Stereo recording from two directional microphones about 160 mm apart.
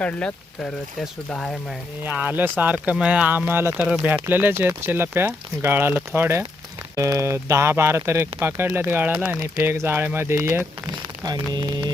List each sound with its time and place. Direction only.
0.0 s speech: 5° left (ahead or behind)
2.0 s speech: 10° right (ahead or behind)
11.3 s speech: 25° right (ahead or behind)